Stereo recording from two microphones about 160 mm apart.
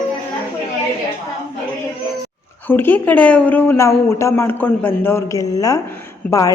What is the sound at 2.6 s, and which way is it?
Speech, 10° left (ahead or behind).